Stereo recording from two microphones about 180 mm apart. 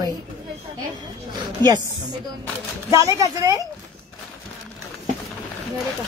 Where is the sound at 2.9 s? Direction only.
15° right (ahead or behind).